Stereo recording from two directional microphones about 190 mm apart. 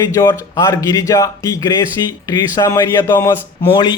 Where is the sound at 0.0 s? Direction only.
20° left (ahead or behind).